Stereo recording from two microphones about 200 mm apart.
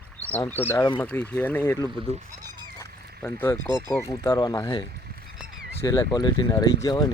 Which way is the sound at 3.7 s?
20° right (ahead or behind).